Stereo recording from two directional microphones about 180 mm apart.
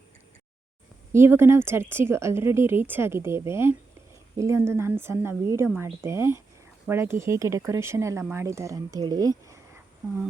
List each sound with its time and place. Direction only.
1.1 s speech: 15° right (ahead or behind)